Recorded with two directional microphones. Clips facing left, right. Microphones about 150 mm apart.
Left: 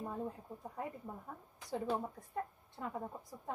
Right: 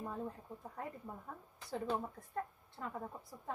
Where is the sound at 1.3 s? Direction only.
10° left (ahead or behind).